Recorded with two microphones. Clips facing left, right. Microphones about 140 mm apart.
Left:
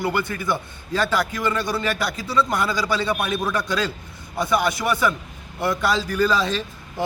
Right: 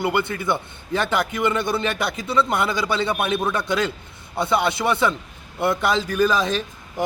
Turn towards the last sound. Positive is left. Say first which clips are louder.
# right 2 dB
turn(degrees=-15)  # may be behind; listen again after turning